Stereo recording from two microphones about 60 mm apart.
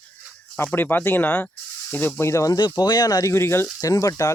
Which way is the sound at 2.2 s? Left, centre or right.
Left.